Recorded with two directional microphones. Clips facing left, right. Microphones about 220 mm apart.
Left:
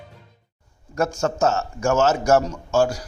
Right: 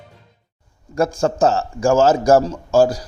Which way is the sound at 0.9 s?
35° right (ahead or behind).